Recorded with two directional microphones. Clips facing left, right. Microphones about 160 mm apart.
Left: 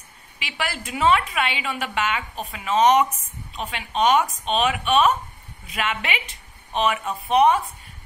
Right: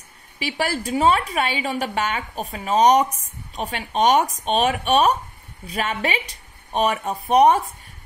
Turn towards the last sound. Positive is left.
turn(degrees=-40)  # may be behind; listen again after turning